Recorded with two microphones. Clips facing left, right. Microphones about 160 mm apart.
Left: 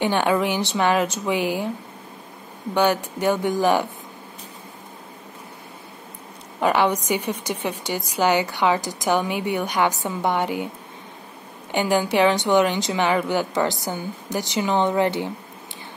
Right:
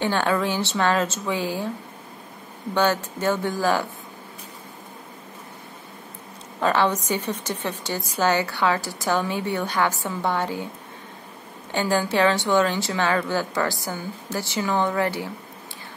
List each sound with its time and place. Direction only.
0.0 s a woman's voice: 15° left (ahead or behind)
2.7 s a woman's voice: 15° left (ahead or behind)
6.6 s a woman's voice: 15° left (ahead or behind)
11.7 s a woman's voice: 15° left (ahead or behind)